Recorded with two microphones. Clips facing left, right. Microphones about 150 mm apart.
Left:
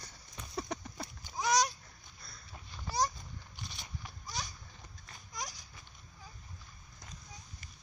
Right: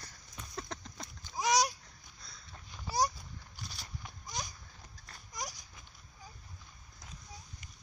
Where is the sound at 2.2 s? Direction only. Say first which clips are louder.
Left 1 dB; centre (ahead or behind).